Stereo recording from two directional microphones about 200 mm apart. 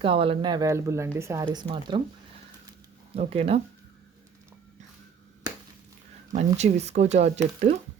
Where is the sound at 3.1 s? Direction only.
30° right (ahead or behind).